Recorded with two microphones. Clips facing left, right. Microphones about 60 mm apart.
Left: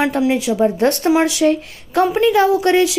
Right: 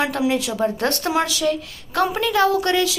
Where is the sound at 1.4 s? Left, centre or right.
Left.